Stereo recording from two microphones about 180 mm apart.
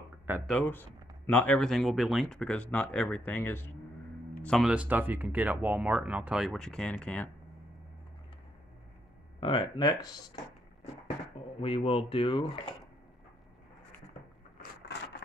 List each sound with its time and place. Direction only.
0.5 s speech: 10° left (ahead or behind)
9.4 s speech: 25° left (ahead or behind)
11.6 s speech: 30° left (ahead or behind)